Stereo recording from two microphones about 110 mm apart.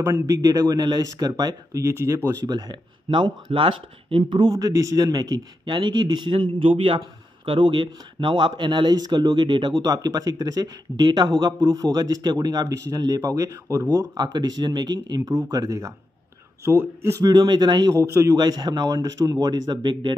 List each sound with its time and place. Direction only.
0.0 s a man's voice: 30° right (ahead or behind); by 4.2 s 50° right (ahead or behind)
4.2 s a man's voice: 40° right (ahead or behind)
14.1 s a man's voice: 40° right (ahead or behind)
17.3 s speech: 40° right (ahead or behind)
17.9 s speech: 25° right (ahead or behind)
18.4 s a man's voice: 40° right (ahead or behind)